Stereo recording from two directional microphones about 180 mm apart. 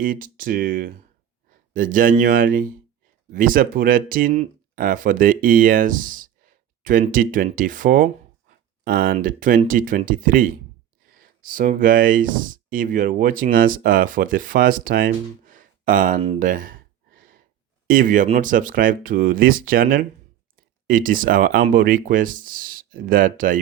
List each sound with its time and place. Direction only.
0.0 s speech: 50° right (ahead or behind)
17.8 s speech: 50° right (ahead or behind)